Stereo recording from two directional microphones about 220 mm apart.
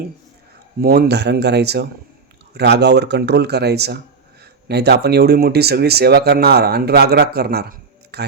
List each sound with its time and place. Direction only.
0.8 s speech: 45° right (ahead or behind)